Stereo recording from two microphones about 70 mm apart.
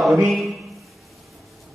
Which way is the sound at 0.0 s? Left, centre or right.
Centre.